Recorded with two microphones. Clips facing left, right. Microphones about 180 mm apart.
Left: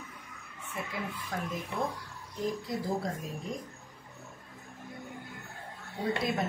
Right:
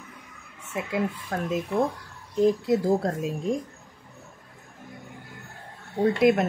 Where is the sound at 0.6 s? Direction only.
80° right.